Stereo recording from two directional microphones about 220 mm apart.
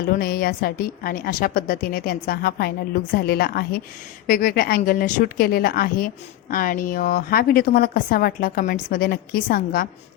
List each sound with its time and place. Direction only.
0.2 s a woman's voice: 45° left (ahead or behind)